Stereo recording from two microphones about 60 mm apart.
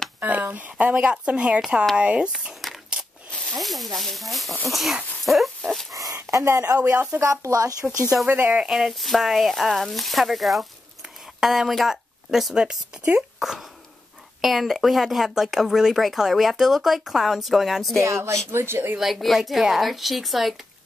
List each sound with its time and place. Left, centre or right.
0.2 s speech: right
2.6 s a sound: centre
3.3 s zipper: centre
3.5 s speech: centre
5.2 s dog: centre
5.9 s a sound: right
7.2 s speech: right
8.3 s speech: right
8.6 s speech: centre
17.9 s speech: right
18.5 s speech: right
18.9 s speech: centre